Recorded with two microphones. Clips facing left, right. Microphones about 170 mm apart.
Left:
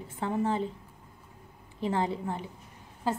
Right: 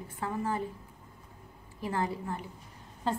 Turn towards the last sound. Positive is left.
turn(degrees=5)  # may be behind; listen again after turning